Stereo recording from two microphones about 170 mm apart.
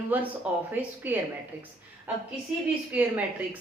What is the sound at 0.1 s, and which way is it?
A woman's voice, 10° right (ahead or behind).